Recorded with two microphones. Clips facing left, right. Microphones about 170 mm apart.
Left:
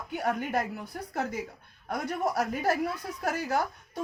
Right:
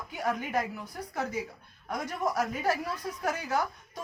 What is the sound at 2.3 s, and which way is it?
Speech, 45° left (ahead or behind).